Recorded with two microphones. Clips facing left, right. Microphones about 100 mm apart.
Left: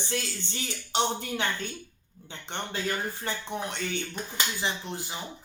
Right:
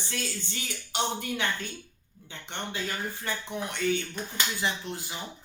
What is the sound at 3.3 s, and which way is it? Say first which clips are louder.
Speech: right 2 dB; 30° left (ahead or behind).